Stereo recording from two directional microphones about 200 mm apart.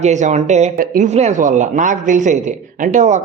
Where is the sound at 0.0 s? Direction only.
35° right (ahead or behind).